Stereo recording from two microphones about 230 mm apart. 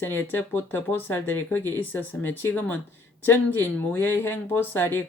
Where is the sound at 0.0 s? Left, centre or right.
Centre.